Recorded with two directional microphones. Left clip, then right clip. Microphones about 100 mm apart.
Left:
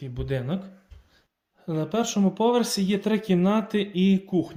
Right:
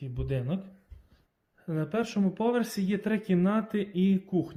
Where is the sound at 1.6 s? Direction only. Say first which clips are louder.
Left 4 dB; 25° left (ahead or behind).